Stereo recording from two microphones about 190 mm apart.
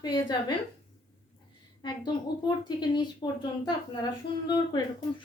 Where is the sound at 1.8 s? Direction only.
25° left (ahead or behind).